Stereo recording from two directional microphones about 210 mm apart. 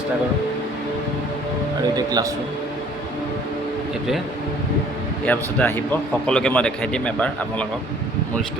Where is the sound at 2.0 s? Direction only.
20° right (ahead or behind).